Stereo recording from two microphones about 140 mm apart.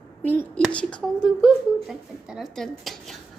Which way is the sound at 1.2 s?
Centre (ahead or behind).